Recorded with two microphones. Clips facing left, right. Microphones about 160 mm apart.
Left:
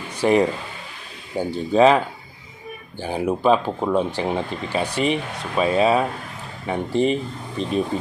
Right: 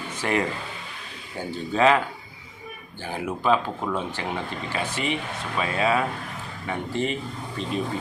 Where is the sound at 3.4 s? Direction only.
20° left (ahead or behind).